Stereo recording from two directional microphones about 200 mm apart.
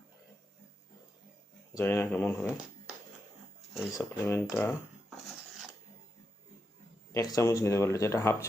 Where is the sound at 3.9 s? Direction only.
15° left (ahead or behind).